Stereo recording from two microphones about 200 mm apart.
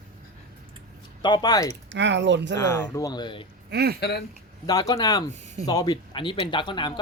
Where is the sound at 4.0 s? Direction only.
55° left (ahead or behind).